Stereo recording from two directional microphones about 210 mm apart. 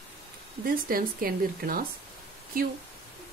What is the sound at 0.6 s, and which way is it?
Speech, 45° right (ahead or behind).